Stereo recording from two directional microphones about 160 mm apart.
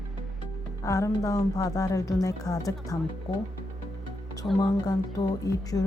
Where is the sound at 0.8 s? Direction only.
20° left (ahead or behind).